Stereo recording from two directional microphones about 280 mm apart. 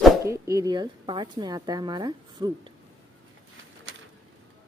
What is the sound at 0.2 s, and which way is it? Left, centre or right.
Speech, centre.